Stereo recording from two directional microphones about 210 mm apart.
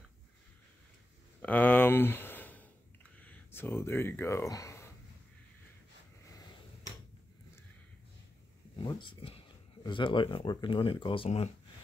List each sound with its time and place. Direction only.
1.4 s a sound: 5° left (ahead or behind)
3.2 s speech: 10° left (ahead or behind)
8.7 s speech: 25° left (ahead or behind)